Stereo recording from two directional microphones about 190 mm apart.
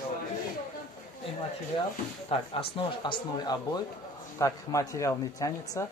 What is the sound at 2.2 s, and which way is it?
A man's voice, 25° left (ahead or behind).